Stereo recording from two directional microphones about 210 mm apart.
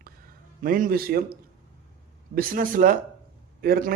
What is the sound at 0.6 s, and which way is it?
Speech, 40° right (ahead or behind).